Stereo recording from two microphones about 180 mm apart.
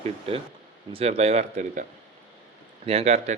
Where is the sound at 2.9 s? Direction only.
35° right (ahead or behind).